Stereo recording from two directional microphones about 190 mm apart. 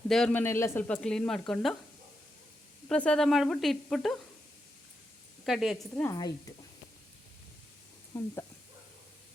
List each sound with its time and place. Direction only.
0.1 s speech: 5° left (ahead or behind)
2.9 s speech: 5° left (ahead or behind)
5.5 s speech: centre (ahead or behind)
6.0 s a woman's voice: 20° left (ahead or behind)
8.1 s speech: 15° left (ahead or behind)